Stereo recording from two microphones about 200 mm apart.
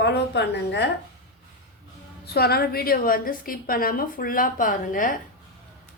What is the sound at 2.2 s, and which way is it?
A woman's voice, 50° left (ahead or behind).